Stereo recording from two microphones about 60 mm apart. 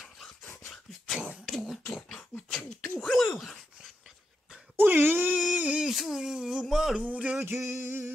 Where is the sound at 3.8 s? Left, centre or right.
Centre.